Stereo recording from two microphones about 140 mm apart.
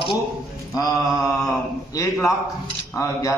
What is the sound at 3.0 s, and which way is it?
Speech, 20° left (ahead or behind).